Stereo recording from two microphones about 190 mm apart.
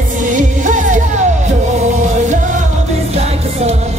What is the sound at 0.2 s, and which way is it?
Music, 40° right (ahead or behind).